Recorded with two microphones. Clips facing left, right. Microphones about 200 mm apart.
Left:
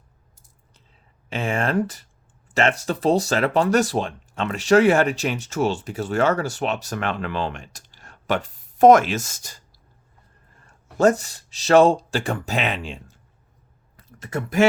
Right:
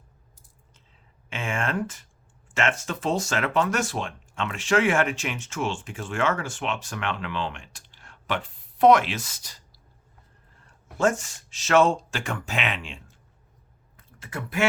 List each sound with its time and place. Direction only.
1.3 s speech: 35° left (ahead or behind)
10.9 s speech: 40° left (ahead or behind)
13.9 s a sound: 40° left (ahead or behind)